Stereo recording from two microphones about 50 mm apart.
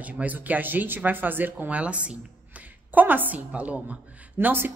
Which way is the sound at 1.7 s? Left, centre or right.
Right.